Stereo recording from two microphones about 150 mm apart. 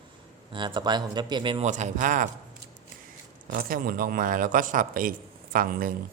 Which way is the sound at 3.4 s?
70° right (ahead or behind).